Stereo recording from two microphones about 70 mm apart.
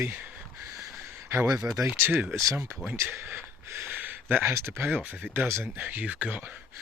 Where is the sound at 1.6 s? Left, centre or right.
Right.